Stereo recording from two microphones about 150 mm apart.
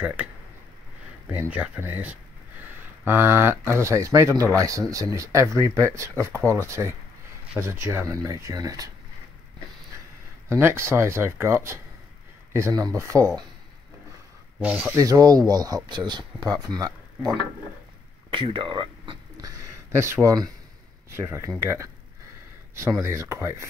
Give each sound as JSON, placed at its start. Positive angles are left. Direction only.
{"t": 0.0, "sound": "speech", "side_deg": -10}
{"t": 1.3, "sound": "speech", "side_deg": -10}
{"t": 10.5, "sound": "speech", "side_deg": -20}
{"t": 14.6, "sound": "speech", "side_deg": -10}
{"t": 15.0, "sound": "speech", "side_deg": -25}
{"t": 18.3, "sound": "a sound", "side_deg": -35}
{"t": 21.1, "sound": "speech", "side_deg": -20}